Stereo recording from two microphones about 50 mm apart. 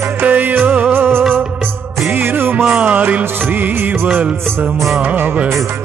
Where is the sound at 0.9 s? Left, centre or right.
Right.